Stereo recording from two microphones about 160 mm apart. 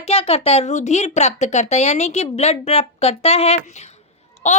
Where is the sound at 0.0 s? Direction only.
40° left (ahead or behind).